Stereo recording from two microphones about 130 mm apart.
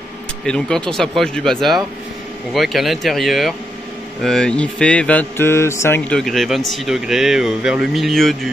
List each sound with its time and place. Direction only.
0.5 s speech: 5° left (ahead or behind)